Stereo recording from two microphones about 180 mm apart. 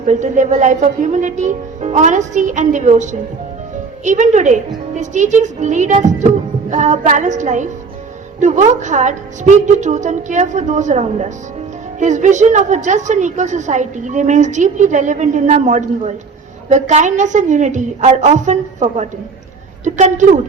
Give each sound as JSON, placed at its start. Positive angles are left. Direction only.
{"t": 0.0, "sound": "a woman's voice", "side_deg": -40}
{"t": 4.9, "sound": "music", "side_deg": -40}
{"t": 8.4, "sound": "a woman's voice", "side_deg": -40}